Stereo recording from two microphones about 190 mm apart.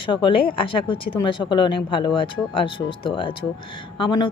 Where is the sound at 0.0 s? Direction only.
25° left (ahead or behind).